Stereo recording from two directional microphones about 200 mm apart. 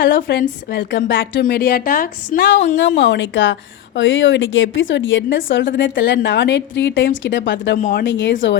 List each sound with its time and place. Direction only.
0.3 s a woman's voice: 50° left (ahead or behind)
2.7 s speech: 65° left (ahead or behind)
7.8 s a woman's voice: 45° left (ahead or behind)
8.0 s speech: 65° left (ahead or behind)